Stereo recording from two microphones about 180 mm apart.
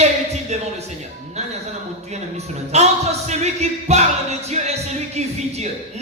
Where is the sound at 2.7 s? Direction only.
40° right (ahead or behind).